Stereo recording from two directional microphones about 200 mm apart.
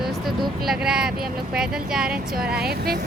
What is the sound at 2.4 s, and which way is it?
Speech, 50° right (ahead or behind).